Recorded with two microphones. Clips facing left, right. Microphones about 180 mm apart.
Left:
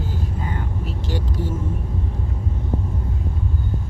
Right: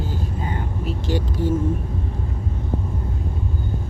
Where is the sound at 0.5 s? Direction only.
15° right (ahead or behind).